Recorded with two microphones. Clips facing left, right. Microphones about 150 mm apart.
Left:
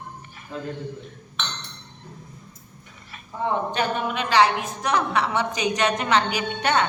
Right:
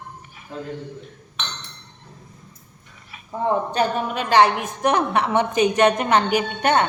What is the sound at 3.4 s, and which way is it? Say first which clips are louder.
A woman's voice: right 3 dB; 40° right (ahead or behind).